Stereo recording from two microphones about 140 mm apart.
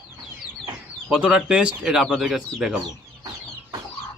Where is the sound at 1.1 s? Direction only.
5° right (ahead or behind).